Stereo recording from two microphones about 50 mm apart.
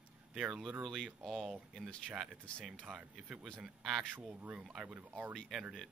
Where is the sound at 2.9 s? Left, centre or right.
Right.